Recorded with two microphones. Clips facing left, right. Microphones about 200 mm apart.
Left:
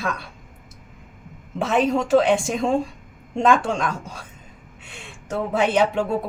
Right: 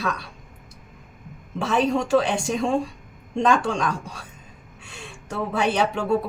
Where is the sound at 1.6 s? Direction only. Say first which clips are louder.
Left 2 dB; 20° left (ahead or behind).